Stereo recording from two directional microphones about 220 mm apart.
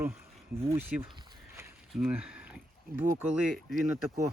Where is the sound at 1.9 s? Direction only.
5° right (ahead or behind).